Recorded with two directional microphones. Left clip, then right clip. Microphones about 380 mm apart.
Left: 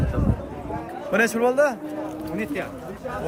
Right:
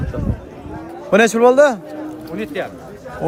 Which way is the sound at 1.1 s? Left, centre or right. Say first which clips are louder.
Right 9 dB; centre.